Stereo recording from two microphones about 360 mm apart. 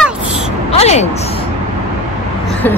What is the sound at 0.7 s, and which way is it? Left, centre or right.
Speech, centre.